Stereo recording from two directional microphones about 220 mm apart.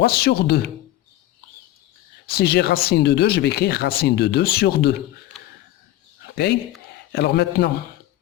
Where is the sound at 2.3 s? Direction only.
45° left (ahead or behind).